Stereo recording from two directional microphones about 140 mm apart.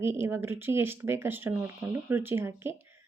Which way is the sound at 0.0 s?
15° right (ahead or behind).